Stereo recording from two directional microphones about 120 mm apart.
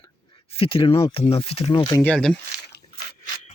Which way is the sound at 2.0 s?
10° left (ahead or behind).